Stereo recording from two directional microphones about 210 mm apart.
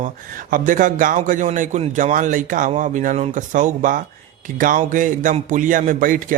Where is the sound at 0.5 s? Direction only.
40° right (ahead or behind).